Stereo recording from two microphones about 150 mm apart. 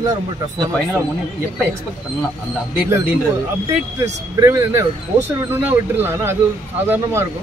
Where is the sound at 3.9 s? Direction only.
20° right (ahead or behind).